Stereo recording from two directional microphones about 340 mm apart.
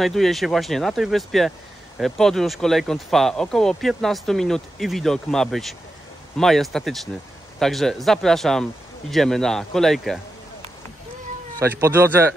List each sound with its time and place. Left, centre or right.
0.0 s speech: centre
11.6 s speech: centre